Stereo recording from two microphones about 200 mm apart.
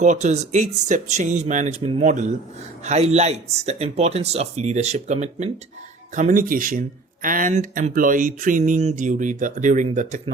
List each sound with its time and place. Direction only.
0.0 s speech: 35° right (ahead or behind)